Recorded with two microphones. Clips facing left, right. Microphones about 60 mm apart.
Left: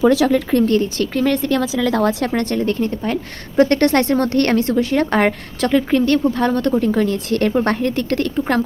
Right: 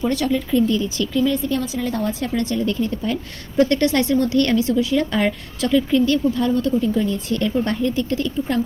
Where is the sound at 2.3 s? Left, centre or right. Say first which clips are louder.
Left 3 dB; left.